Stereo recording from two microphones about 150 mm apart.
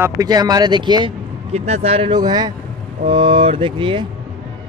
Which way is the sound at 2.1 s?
25° right (ahead or behind).